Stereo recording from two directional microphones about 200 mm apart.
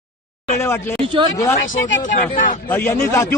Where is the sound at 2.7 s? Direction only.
10° left (ahead or behind).